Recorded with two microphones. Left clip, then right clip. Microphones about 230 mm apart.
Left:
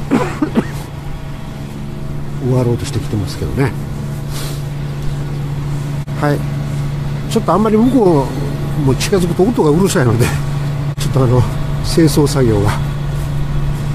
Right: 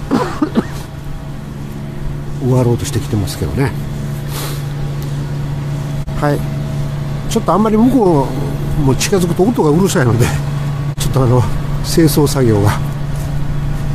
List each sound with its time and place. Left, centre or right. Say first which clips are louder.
0.1 s throat clearing: even; centre
2.5 s speech: right 2 dB; centre
6.1 s speech: right 1 dB; centre
11.0 s speech: right 1 dB; centre